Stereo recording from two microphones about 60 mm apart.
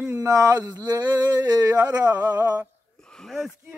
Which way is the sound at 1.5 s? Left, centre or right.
Right.